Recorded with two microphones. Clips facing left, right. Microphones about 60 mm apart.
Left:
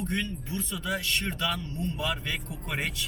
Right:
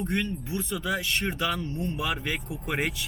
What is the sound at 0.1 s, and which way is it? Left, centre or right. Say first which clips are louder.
Speech: right 3 dB; right.